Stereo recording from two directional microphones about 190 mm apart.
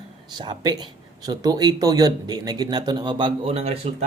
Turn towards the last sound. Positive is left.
turn(degrees=-30)  # may be behind; listen again after turning